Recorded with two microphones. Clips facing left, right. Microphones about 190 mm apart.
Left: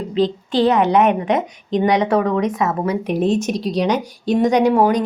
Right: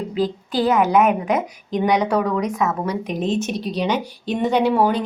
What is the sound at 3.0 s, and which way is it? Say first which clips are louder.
Speech: left 5 dB; 65° left (ahead or behind).